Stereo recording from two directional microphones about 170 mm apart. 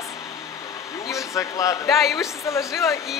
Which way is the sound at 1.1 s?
20° left (ahead or behind).